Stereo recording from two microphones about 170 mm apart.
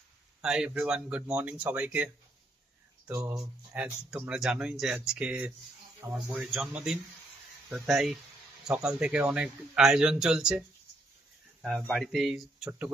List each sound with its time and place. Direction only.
0.4 s speech: 5° right (ahead or behind)
3.1 s speech: 10° right (ahead or behind)
11.9 s speech: centre (ahead or behind)